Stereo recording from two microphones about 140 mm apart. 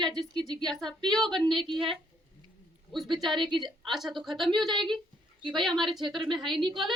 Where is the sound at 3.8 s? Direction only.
Centre (ahead or behind).